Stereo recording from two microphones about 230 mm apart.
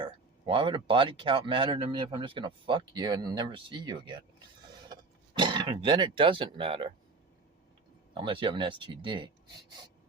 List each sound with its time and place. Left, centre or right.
0.0 s speech: right
8.1 s speech: right